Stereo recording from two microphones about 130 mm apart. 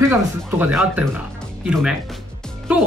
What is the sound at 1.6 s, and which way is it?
Speech, 5° right (ahead or behind).